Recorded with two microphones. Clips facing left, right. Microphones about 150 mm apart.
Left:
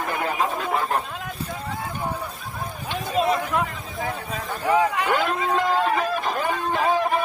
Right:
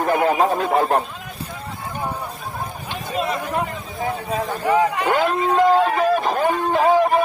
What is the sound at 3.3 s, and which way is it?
A man's voice, 20° right (ahead or behind).